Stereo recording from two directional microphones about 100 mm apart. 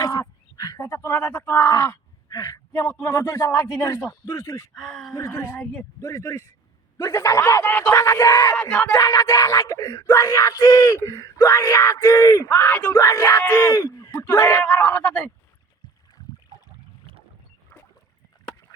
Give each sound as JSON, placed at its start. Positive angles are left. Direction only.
{"t": 0.0, "sound": "duck", "side_deg": 40}
{"t": 0.8, "sound": "speech", "side_deg": 30}
{"t": 1.7, "sound": "speech", "side_deg": 35}
{"t": 4.7, "sound": "speech", "side_deg": 0}
{"t": 5.1, "sound": "speech", "side_deg": 30}
{"t": 7.9, "sound": "speech", "side_deg": 30}
{"t": 12.5, "sound": "speech", "side_deg": 20}
{"t": 13.0, "sound": "speech", "side_deg": 35}
{"t": 14.6, "sound": "a man's voice", "side_deg": 15}